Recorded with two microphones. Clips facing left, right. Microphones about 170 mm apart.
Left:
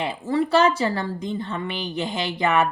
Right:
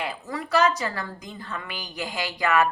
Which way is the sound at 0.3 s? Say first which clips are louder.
Left 4 dB; 30° left (ahead or behind).